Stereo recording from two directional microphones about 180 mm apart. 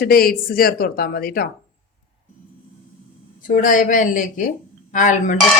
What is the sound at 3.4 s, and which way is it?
Speech, 50° left (ahead or behind).